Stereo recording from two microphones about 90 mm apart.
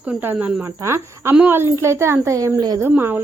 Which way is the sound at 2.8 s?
25° right (ahead or behind).